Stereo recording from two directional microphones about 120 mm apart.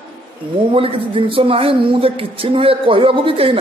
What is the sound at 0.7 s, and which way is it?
A man's voice, 50° right (ahead or behind).